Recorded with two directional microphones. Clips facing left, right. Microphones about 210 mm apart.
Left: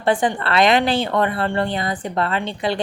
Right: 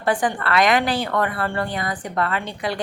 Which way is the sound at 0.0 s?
25° left (ahead or behind).